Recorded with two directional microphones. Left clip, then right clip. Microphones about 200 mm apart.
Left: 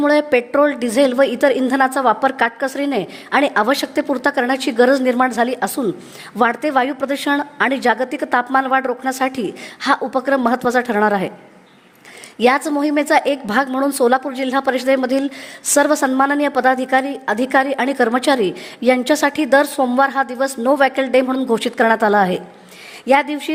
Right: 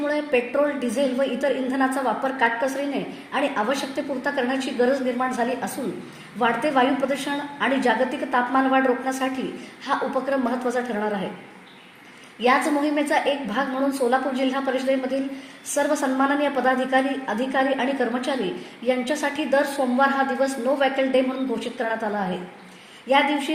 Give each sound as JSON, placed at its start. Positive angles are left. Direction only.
{"t": 0.0, "sound": "a woman's voice", "side_deg": 55}
{"t": 12.4, "sound": "a woman's voice", "side_deg": 55}